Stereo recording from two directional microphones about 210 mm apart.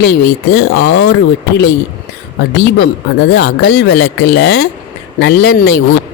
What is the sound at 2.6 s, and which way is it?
Speech, 55° left (ahead or behind).